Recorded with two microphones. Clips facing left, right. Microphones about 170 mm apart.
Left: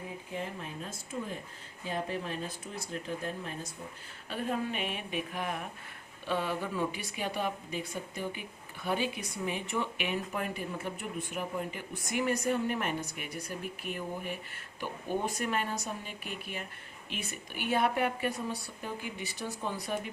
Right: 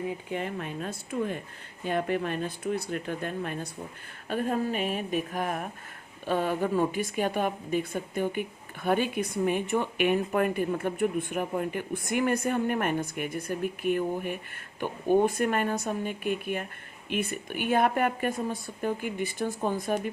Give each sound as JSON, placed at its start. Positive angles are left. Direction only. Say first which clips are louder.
{"t": 0.3, "sound": "speech", "louder": "right 6 dB", "side_deg": -65}
{"t": 4.3, "sound": "a woman's voice", "louder": "right 6 dB", "side_deg": -45}